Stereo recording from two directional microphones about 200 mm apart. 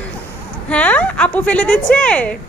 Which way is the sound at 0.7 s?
5° left (ahead or behind).